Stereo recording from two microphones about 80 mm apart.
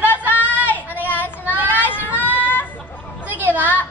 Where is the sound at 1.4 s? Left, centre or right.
Right.